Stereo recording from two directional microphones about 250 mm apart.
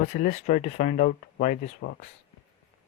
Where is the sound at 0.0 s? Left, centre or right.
Left.